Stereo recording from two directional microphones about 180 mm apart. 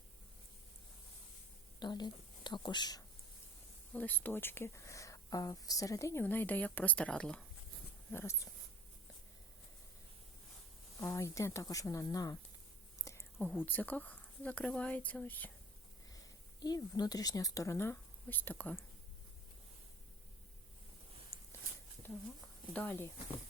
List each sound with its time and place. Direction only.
1.8 s a woman's voice: 25° left (ahead or behind)
3.9 s speech: 10° left (ahead or behind)
11.0 s speech: 15° left (ahead or behind)
13.1 s whispering: 15° left (ahead or behind)
13.5 s speech: 10° left (ahead or behind)
16.0 s speech: 20° left (ahead or behind)
21.3 s a sound: 15° left (ahead or behind)
22.7 s speech: 10° left (ahead or behind)